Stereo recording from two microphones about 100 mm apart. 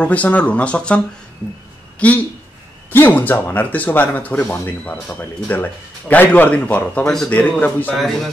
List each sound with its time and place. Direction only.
0.0 s speech: 15° left (ahead or behind)
7.9 s speech: centre (ahead or behind)